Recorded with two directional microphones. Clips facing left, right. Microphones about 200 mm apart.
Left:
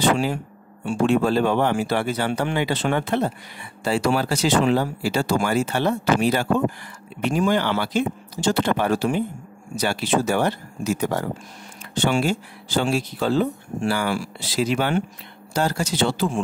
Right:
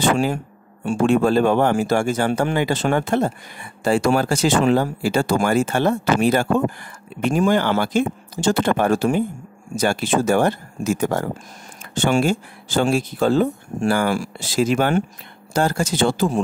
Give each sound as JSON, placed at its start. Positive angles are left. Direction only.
{"t": 0.0, "sound": "speech", "side_deg": -45}